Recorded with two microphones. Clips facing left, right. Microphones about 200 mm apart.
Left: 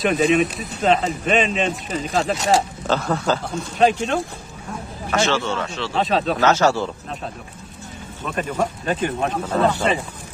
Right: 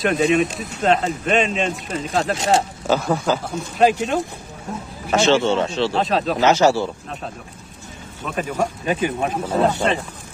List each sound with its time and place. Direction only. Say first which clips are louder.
0.0 s speech: even; centre (ahead or behind)
2.9 s speech: right 2 dB; 10° right (ahead or behind)
5.1 s speech: right 5 dB; 25° right (ahead or behind)
5.9 s speech: left 4 dB; centre (ahead or behind)
6.4 s speech: right 3 dB; 15° right (ahead or behind)
8.2 s speech: even; 5° right (ahead or behind)